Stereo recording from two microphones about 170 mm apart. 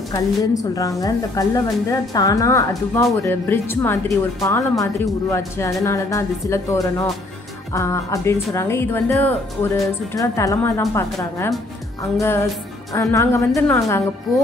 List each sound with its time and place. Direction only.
0.1 s a woman's voice: 20° left (ahead or behind)